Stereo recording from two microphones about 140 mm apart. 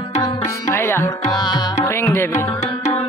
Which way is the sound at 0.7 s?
20° left (ahead or behind).